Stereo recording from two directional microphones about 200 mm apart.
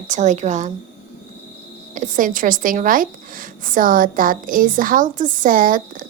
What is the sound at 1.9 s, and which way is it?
Speech, 40° right (ahead or behind).